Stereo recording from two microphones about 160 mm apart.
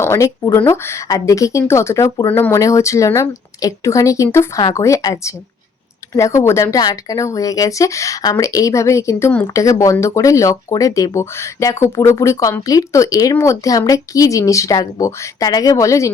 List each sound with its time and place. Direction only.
0.0 s speech: 20° left (ahead or behind)